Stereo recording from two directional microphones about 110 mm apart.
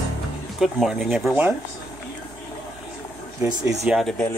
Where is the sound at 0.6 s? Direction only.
5° right (ahead or behind).